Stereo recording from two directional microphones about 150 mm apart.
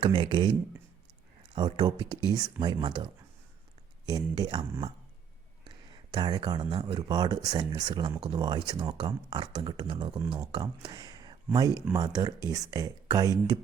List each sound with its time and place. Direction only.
0.0 s speech: 35° right (ahead or behind)
1.5 s speech: 30° right (ahead or behind)
5.6 s speech: 30° right (ahead or behind)